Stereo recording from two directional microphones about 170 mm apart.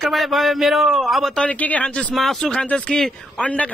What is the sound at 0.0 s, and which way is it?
Speech, centre (ahead or behind).